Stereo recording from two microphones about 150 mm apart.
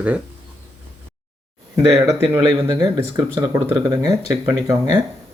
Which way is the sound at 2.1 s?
20° right (ahead or behind).